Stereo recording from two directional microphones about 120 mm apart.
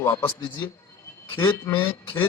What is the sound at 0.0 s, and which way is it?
A man's voice, 20° left (ahead or behind).